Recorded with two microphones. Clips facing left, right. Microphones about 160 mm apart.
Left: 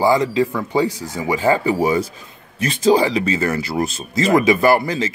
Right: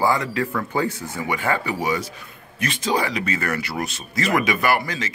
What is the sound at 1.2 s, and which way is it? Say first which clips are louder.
Speech: left 7 dB; 30° left (ahead or behind).